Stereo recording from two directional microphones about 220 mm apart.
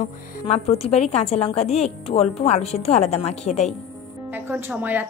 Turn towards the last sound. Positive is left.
turn(degrees=-10)  # may be behind; listen again after turning